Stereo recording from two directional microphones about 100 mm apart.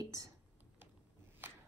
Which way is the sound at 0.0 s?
35° right (ahead or behind).